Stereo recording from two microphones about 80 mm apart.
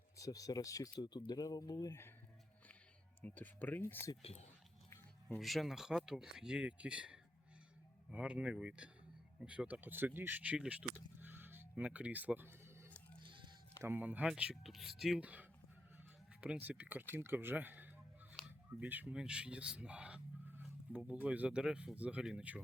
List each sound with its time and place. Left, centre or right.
0.2 s speech: left
1.9 s speech: left
3.2 s speech: left
5.4 s speech: centre; by 12.9 s right
13.2 s a sound: right
13.8 s speech: right
14.5 s speech: centre
15.2 s speech: centre
18.4 s a sound: right
19.1 s speech: centre